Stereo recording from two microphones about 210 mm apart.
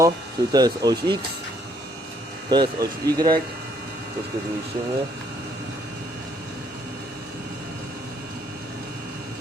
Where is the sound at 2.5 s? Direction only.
20° right (ahead or behind).